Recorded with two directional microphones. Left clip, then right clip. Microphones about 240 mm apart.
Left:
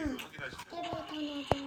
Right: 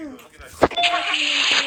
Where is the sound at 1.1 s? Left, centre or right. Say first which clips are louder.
Right 17 dB; right.